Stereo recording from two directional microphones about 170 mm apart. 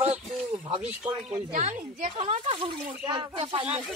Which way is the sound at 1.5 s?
45° right (ahead or behind).